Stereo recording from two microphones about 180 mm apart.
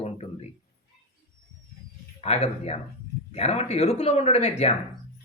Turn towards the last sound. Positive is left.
turn(degrees=35)  # may be behind; listen again after turning